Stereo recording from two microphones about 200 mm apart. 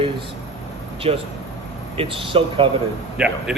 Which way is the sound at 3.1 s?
5° right (ahead or behind).